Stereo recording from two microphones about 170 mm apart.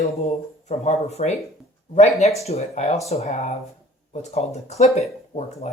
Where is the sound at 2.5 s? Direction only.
40° left (ahead or behind).